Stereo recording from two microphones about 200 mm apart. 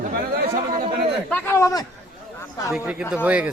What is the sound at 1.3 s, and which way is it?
Speech, 10° left (ahead or behind).